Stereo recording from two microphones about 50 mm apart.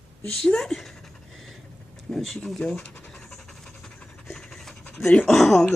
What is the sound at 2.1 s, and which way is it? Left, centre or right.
Speech, centre.